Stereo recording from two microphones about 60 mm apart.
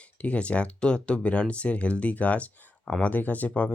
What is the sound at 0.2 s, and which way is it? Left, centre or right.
Speech, left.